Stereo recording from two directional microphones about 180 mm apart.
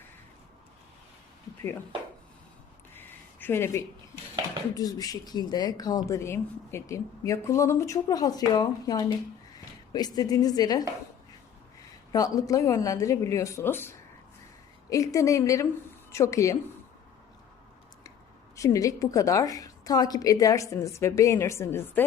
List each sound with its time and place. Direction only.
2.9 s a sound: 10° left (ahead or behind)
4.7 s speech: 20° left (ahead or behind)
12.1 s a woman's voice: 20° left (ahead or behind)
18.5 s a woman's voice: 15° left (ahead or behind)